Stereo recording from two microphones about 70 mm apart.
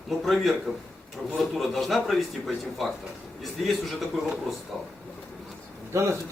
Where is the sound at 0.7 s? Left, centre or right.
Centre.